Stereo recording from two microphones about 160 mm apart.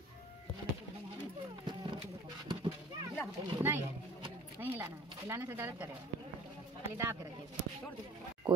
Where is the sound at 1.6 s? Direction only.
35° right (ahead or behind).